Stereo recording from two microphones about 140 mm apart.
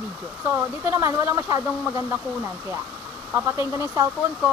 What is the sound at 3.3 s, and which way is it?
Speech, 20° right (ahead or behind).